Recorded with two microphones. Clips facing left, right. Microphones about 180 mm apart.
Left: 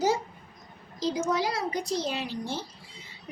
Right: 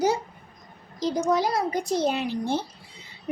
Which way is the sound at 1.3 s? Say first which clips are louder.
Right 5 dB; 50° right (ahead or behind).